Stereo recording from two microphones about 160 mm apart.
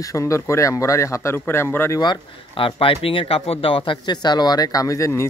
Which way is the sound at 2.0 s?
30° left (ahead or behind).